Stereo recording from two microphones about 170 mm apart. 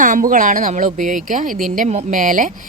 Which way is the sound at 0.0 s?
50° right (ahead or behind).